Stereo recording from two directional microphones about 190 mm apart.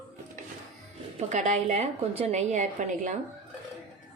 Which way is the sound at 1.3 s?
40° right (ahead or behind).